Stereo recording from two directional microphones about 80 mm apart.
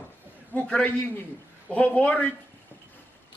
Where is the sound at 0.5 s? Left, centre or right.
Centre.